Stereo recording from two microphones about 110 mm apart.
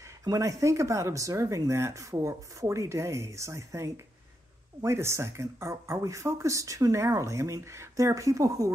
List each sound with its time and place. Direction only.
0.2 s speech: 30° right (ahead or behind)